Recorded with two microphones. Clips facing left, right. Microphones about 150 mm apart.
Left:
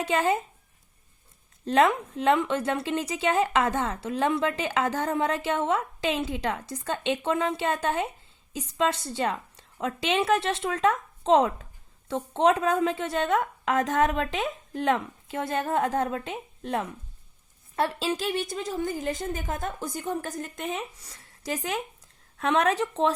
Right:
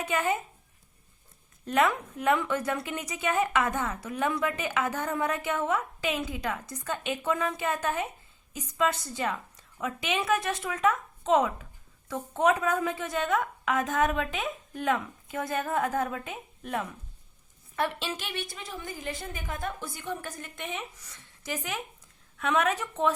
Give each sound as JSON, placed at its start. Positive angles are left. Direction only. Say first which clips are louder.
{"t": 0.0, "sound": "a woman's voice", "louder": "left 4 dB", "side_deg": 30}
{"t": 1.6, "sound": "a woman's voice", "louder": "left 4 dB", "side_deg": 30}